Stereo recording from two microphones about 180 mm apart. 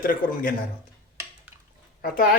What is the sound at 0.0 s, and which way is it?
Speech, 50° left (ahead or behind).